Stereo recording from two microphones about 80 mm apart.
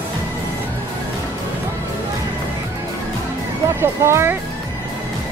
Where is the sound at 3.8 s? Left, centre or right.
Right.